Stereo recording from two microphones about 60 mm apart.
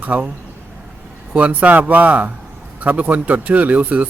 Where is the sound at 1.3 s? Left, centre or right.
Right.